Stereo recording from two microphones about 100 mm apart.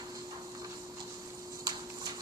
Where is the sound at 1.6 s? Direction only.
40° right (ahead or behind).